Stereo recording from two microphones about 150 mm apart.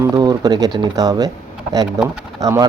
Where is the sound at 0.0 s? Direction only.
25° right (ahead or behind).